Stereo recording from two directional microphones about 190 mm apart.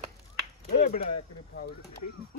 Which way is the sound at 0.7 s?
40° left (ahead or behind).